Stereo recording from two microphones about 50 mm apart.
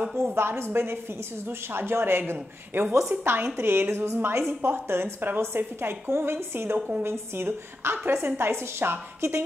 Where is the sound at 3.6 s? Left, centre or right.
Right.